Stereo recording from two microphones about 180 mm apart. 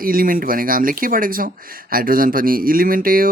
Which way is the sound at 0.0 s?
55° right (ahead or behind).